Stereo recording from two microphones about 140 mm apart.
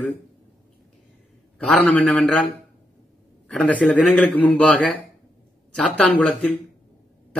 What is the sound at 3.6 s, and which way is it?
A man's voice, 10° left (ahead or behind).